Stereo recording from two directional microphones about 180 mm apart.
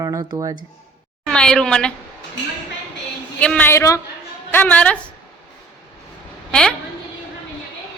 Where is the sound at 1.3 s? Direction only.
5° left (ahead or behind).